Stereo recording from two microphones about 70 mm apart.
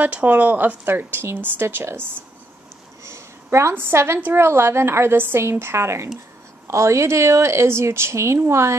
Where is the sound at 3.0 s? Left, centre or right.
Right.